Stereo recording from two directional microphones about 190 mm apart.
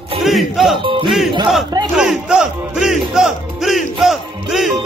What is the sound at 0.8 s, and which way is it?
Music, 25° right (ahead or behind).